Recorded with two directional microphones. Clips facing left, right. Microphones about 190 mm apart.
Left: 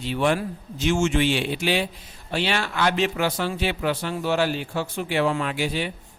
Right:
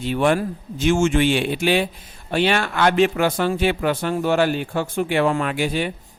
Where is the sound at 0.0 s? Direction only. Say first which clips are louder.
Right 4 dB; 50° right (ahead or behind).